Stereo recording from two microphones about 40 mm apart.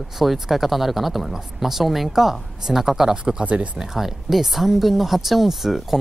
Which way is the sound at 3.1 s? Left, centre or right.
Right.